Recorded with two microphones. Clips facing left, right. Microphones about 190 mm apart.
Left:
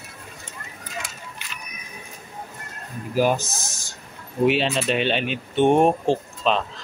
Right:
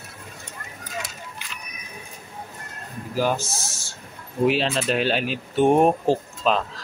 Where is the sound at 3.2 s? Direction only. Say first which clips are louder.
Left 3 dB; 15° left (ahead or behind).